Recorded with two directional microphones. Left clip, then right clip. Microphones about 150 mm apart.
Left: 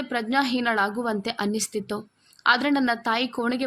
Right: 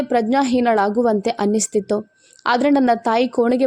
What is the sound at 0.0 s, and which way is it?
A woman's voice, 35° right (ahead or behind).